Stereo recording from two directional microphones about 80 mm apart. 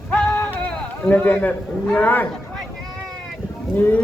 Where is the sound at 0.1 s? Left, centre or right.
Centre.